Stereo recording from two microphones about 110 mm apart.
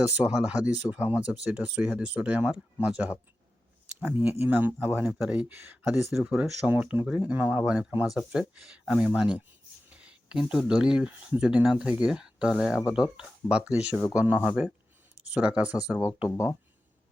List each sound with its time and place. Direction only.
0.1 s speech: 10° right (ahead or behind)
4.0 s speech: 15° right (ahead or behind)
6.1 s speech: 5° right (ahead or behind)